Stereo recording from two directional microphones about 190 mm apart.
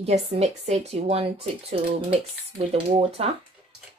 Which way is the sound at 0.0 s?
35° right (ahead or behind).